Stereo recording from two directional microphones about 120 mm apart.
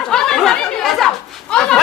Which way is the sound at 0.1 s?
5° left (ahead or behind).